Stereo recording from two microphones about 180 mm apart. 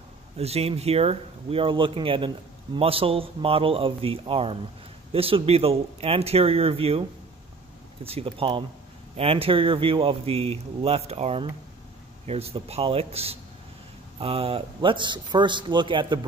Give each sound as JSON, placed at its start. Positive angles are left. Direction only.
{"t": 0.4, "sound": "a man's voice", "side_deg": -35}